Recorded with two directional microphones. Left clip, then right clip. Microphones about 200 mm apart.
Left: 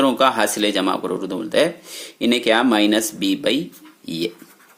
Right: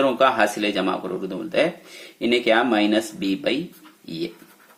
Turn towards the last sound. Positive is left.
turn(degrees=35)  # may be behind; listen again after turning